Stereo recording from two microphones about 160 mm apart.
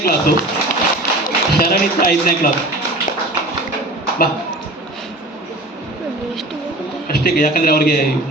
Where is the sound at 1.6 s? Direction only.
65° left (ahead or behind).